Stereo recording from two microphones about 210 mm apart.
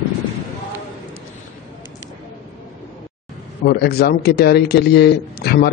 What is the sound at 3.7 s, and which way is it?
A man's voice, 50° left (ahead or behind).